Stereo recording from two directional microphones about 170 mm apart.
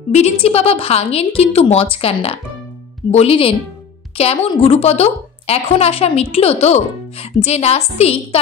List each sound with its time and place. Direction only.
0.1 s a woman's voice: 40° left (ahead or behind)